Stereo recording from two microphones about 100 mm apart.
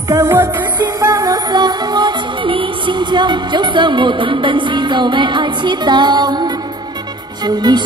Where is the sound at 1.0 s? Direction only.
35° right (ahead or behind).